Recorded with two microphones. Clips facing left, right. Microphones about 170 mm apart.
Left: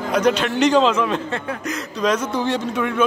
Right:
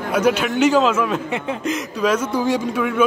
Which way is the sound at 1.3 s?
20° right (ahead or behind).